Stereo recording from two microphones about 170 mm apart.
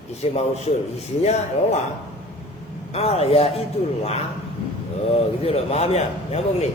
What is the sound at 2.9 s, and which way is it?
Speech, 35° left (ahead or behind).